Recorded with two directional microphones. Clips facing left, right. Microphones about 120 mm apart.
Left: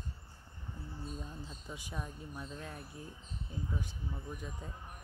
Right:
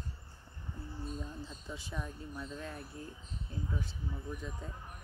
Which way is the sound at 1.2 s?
15° left (ahead or behind).